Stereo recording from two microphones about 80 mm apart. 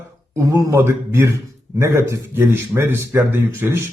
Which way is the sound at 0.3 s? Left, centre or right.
Right.